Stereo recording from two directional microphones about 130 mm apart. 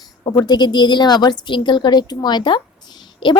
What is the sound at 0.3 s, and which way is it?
A woman's voice, 30° left (ahead or behind).